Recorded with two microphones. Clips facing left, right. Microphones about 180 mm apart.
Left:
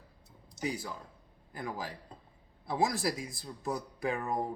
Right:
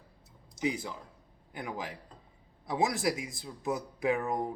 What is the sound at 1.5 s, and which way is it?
A man's voice, 20° right (ahead or behind).